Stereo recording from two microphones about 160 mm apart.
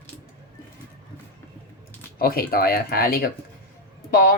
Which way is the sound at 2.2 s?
70° left (ahead or behind).